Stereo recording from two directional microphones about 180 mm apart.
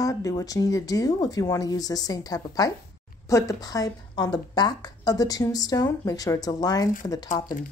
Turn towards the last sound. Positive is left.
turn(degrees=50)  # may be behind; listen again after turning